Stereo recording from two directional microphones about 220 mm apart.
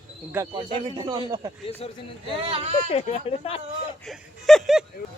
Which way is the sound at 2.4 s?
25° right (ahead or behind).